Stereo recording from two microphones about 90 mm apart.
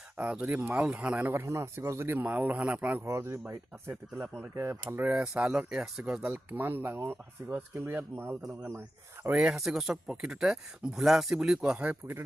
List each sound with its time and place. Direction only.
0.2 s speech: 15° right (ahead or behind)
3.0 s speech: 30° right (ahead or behind)
5.0 s speech: 10° right (ahead or behind)
9.3 s speech: 10° right (ahead or behind)